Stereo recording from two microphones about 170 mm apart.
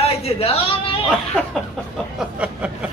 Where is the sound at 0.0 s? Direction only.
35° left (ahead or behind).